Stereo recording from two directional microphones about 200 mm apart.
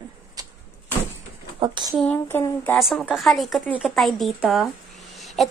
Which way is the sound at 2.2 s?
10° left (ahead or behind).